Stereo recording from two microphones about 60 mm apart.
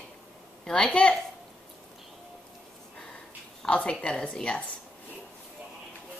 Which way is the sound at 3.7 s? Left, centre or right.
Left.